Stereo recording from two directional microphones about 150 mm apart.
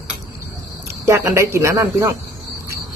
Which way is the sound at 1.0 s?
20° right (ahead or behind).